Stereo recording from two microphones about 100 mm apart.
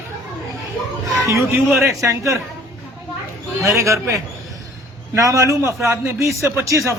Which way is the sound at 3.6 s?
30° right (ahead or behind).